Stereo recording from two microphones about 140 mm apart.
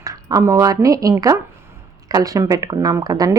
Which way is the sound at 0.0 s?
25° right (ahead or behind).